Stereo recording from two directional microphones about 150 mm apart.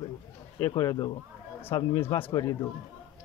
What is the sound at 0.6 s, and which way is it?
Speech, 20° left (ahead or behind).